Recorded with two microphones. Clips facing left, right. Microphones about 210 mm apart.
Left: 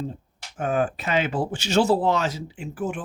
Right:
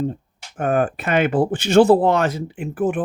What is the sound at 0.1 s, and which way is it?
Speech, 55° right (ahead or behind).